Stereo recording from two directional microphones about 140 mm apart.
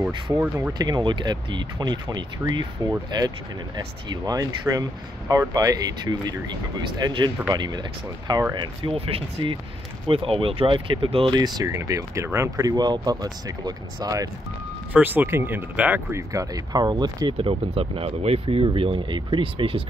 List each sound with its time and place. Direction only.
0.0 s speech: 15° right (ahead or behind)
0.7 s speech: 30° right (ahead or behind)
8.8 s speech: 40° right (ahead or behind)
11.3 s speech: 30° right (ahead or behind)
14.9 s speech: 10° right (ahead or behind); by 19.8 s 40° right (ahead or behind)